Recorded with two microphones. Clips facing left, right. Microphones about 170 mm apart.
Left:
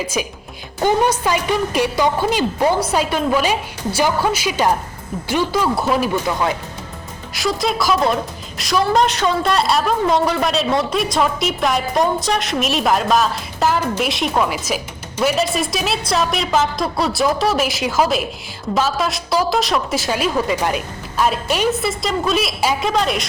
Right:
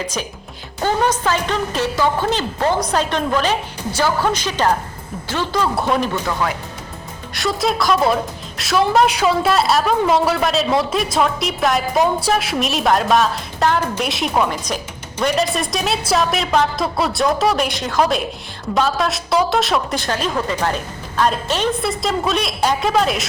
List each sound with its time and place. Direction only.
0.8 s a woman's voice: 10° left (ahead or behind)
6.2 s speech: 20° left (ahead or behind)
7.3 s a woman's voice: centre (ahead or behind)